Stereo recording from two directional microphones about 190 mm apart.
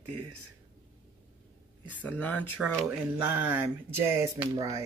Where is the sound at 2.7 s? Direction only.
5° right (ahead or behind).